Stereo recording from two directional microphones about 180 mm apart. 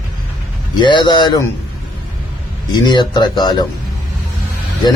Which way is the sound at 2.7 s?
25° left (ahead or behind).